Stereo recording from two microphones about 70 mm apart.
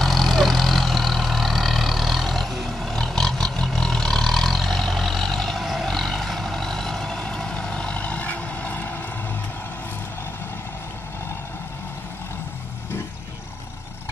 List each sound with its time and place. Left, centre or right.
0.0 s vehicle: centre; by 8.9 s left